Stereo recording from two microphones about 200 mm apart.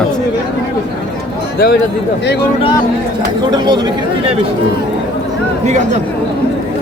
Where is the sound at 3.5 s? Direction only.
20° right (ahead or behind).